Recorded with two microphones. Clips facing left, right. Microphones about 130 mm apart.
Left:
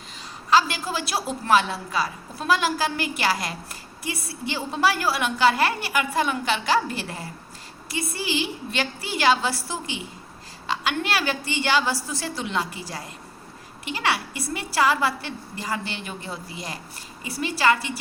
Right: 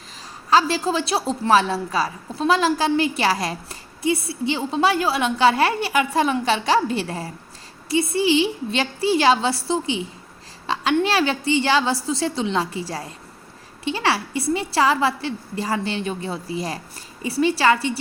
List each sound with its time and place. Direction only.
0.5 s a woman's voice: 30° right (ahead or behind)